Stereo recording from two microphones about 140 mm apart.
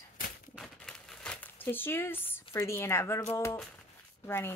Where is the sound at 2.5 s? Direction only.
20° left (ahead or behind).